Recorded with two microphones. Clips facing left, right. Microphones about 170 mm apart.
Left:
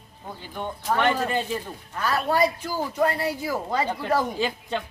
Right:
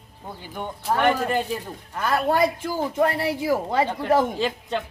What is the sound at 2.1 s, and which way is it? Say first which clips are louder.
Speech: right 2 dB; 55° right (ahead or behind).